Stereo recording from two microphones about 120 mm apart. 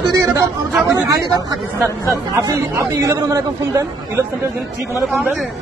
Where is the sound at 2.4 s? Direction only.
30° right (ahead or behind).